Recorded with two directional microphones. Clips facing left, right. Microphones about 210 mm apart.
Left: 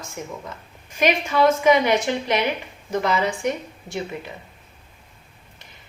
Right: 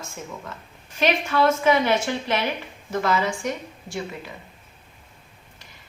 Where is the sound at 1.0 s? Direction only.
15° left (ahead or behind).